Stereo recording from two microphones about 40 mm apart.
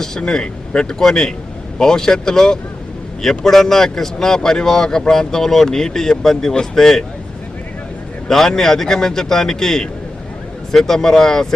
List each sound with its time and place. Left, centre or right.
0.2 s speech: left
8.3 s speech: centre